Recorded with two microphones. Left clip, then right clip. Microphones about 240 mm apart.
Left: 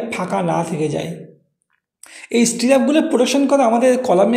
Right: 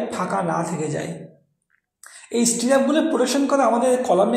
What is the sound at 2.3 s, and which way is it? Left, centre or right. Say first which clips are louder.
A man's voice: left 4 dB; left.